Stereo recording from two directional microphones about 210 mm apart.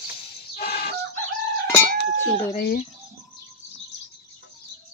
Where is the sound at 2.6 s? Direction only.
45° left (ahead or behind).